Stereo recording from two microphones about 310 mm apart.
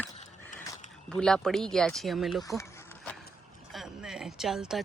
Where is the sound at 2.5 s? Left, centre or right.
Centre.